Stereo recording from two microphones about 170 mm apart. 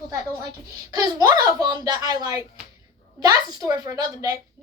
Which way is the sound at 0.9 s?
20° right (ahead or behind).